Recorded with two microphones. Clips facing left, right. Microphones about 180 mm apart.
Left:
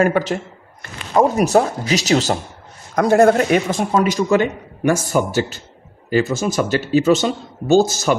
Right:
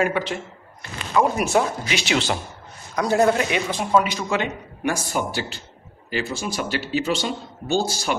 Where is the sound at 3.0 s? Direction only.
55° left (ahead or behind).